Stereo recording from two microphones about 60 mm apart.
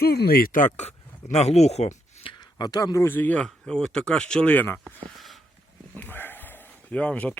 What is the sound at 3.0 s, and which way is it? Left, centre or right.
Speech, left.